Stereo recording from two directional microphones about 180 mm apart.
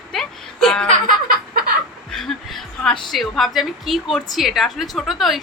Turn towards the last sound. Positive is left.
turn(degrees=0)  # may be behind; listen again after turning